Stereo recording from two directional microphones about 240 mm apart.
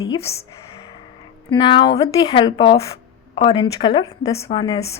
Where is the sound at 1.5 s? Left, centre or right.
Centre.